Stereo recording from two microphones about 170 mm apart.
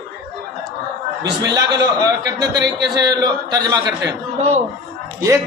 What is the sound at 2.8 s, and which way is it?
A man's voice, 25° right (ahead or behind).